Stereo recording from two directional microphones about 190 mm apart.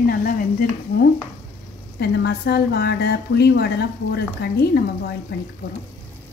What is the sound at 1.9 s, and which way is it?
A woman's voice, 60° left (ahead or behind).